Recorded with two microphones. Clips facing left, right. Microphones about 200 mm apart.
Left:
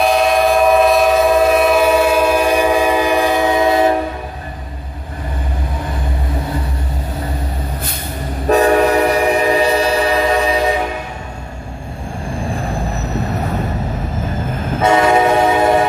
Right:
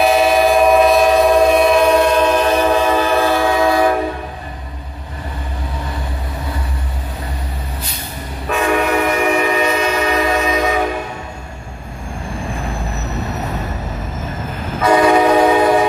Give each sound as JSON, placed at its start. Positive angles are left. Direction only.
{"t": 0.0, "sound": "train", "side_deg": 0}
{"t": 8.5, "sound": "train", "side_deg": 40}
{"t": 14.8, "sound": "train", "side_deg": 25}